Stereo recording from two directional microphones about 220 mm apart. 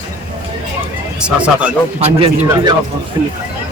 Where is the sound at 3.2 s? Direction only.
15° right (ahead or behind).